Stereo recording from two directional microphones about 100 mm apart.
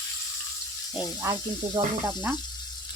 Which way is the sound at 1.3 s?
45° right (ahead or behind).